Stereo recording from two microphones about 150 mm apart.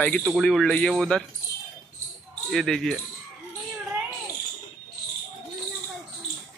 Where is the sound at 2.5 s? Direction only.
Centre (ahead or behind).